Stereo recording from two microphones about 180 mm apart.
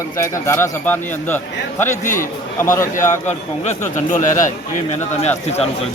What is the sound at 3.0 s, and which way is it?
Speech, 40° left (ahead or behind).